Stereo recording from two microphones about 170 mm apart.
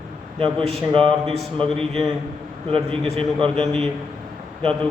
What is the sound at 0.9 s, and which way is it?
Speech, 35° right (ahead or behind).